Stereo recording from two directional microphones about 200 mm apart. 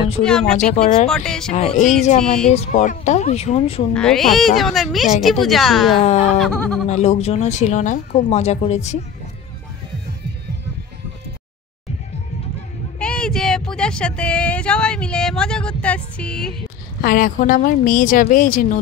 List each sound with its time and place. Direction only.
0.2 s speech: 5° left (ahead or behind)
1.5 s speech: 30° left (ahead or behind)
2.1 s speech: 5° left (ahead or behind)
2.5 s speech: 35° left (ahead or behind)
3.9 s speech: 5° left (ahead or behind)
6.9 s speech: 30° left (ahead or behind)
13.0 s a sound: 5° left (ahead or behind)
17.0 s a woman's voice: 45° left (ahead or behind)